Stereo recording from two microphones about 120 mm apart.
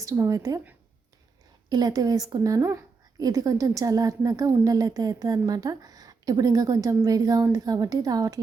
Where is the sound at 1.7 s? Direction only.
35° right (ahead or behind).